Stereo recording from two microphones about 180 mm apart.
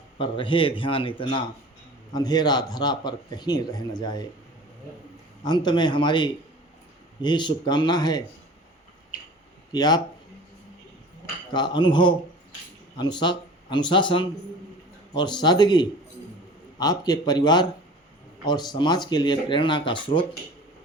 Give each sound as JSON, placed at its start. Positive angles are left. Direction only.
{"t": 0.2, "sound": "speech", "side_deg": 30}
{"t": 5.5, "sound": "speech", "side_deg": 25}
{"t": 9.7, "sound": "speech", "side_deg": 20}
{"t": 11.5, "sound": "speech", "side_deg": 25}